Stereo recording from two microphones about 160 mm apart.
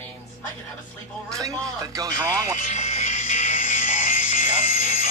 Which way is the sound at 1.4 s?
25° right (ahead or behind).